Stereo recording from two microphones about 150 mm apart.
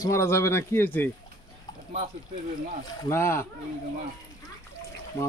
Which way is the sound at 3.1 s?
15° left (ahead or behind).